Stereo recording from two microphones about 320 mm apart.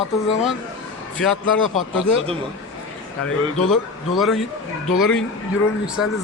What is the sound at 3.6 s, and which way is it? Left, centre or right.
A man's voice, centre.